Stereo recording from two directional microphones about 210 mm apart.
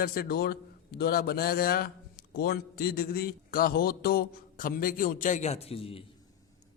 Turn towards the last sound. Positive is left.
turn(degrees=25)  # may be behind; listen again after turning